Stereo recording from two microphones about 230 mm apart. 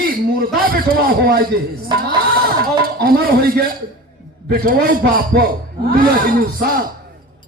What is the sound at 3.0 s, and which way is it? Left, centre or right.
A man's voice, right.